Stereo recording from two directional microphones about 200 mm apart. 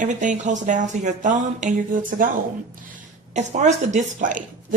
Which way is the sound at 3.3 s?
35° right (ahead or behind).